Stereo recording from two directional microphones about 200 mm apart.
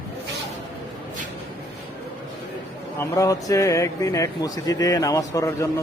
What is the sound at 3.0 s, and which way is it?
Speech, 15° left (ahead or behind).